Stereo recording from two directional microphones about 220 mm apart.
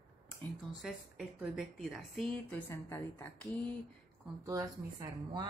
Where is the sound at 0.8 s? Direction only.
5° right (ahead or behind).